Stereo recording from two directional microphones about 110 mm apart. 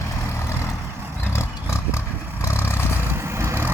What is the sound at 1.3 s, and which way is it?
Horse, 25° left (ahead or behind).